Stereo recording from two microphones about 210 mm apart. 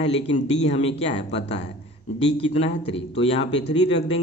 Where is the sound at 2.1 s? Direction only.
25° left (ahead or behind).